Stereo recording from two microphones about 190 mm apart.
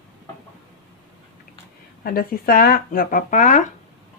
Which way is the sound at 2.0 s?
50° left (ahead or behind).